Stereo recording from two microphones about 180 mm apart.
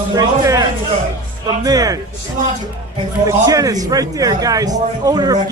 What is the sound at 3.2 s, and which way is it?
A man's voice, 20° right (ahead or behind).